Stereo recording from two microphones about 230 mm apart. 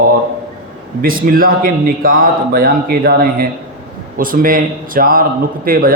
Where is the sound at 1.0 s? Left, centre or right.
Right.